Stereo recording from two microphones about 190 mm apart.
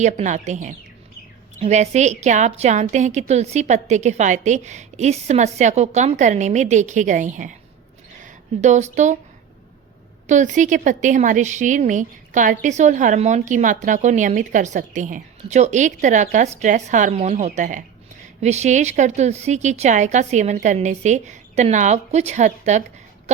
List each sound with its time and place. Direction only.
0.0 s a woman's voice: 40° right (ahead or behind)
10.2 s a woman's voice: 40° right (ahead or behind)